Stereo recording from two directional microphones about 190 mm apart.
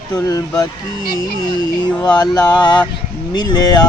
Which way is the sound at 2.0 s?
20° left (ahead or behind).